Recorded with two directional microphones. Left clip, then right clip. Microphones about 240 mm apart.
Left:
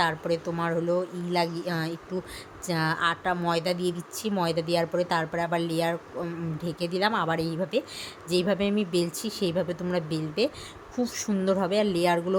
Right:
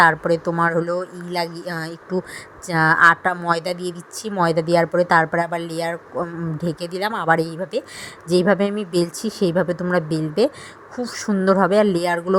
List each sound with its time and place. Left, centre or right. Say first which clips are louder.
0.0 s a woman's voice: right 11 dB; right